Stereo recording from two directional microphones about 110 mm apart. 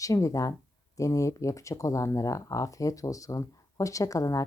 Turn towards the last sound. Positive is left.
turn(degrees=30)  # may be behind; listen again after turning